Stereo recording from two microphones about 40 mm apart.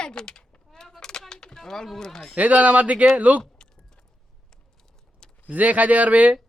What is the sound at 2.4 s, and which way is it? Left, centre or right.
Speech, right.